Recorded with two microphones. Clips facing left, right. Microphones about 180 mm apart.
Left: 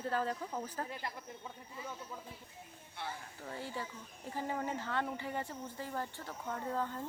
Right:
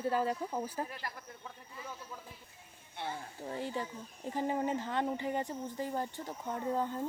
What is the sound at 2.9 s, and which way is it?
Speech, 20° right (ahead or behind).